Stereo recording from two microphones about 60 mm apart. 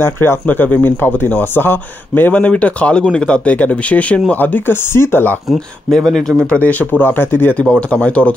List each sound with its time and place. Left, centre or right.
0.0 s speech: left
2.5 s speech: left
6.0 s speech: centre
6.4 s speech: left
7.9 s speech: left